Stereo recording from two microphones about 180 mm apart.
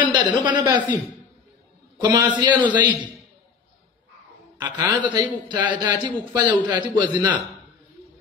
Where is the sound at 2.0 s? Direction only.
25° right (ahead or behind).